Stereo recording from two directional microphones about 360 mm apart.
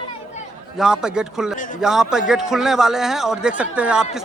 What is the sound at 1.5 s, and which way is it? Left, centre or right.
Speech, left.